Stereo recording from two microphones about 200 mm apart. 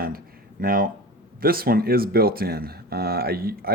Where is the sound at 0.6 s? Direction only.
45° right (ahead or behind).